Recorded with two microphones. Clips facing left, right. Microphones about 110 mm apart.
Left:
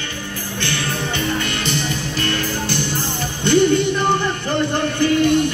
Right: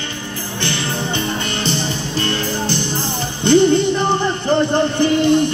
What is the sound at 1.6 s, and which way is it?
Music, 30° right (ahead or behind).